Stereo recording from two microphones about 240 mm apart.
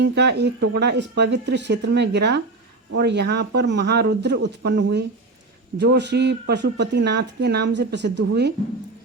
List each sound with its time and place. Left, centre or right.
0.0 s speech: right